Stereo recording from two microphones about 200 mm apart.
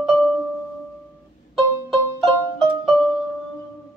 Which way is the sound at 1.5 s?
Centre (ahead or behind).